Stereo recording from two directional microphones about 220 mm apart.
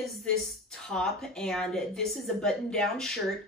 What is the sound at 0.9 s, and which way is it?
A woman's voice, 5° left (ahead or behind).